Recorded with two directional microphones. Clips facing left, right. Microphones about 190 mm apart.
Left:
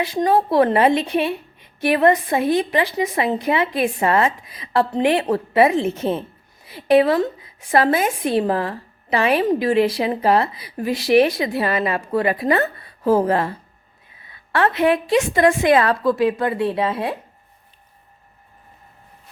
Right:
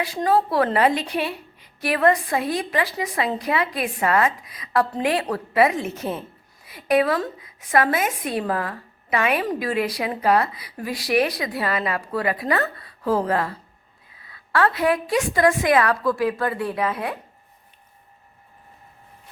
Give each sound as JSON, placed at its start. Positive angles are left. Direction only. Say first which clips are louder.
{"t": 0.0, "sound": "a woman's voice", "louder": "left 3 dB", "side_deg": 20}